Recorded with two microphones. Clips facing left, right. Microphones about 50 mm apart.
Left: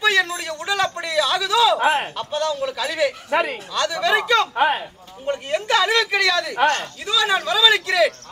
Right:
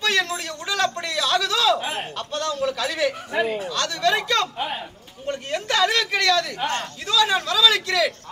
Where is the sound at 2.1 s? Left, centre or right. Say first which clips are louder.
Left 3 dB; centre.